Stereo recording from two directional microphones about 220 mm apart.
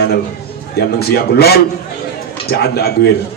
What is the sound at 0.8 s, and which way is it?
Music, 45° left (ahead or behind).